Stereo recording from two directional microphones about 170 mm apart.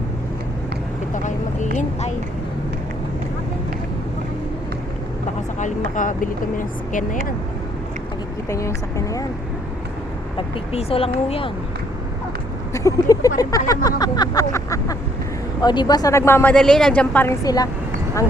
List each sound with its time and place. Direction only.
1.1 s vehicle: 45° left (ahead or behind)
5.9 s speech: 50° left (ahead or behind)
8.4 s a woman's voice: 20° left (ahead or behind)
10.3 s speech: 35° left (ahead or behind)
12.7 s a sound: 20° left (ahead or behind)
15.6 s a woman's voice: 25° left (ahead or behind); by 17.3 s 10° left (ahead or behind)
17.4 s a sound: 20° left (ahead or behind)